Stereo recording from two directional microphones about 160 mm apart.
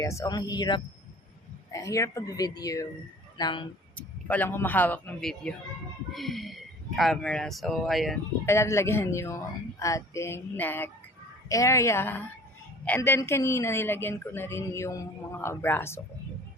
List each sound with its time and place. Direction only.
0.0 s speech: 20° left (ahead or behind)
3.9 s speech: 10° left (ahead or behind)
8.4 s speech: 15° left (ahead or behind)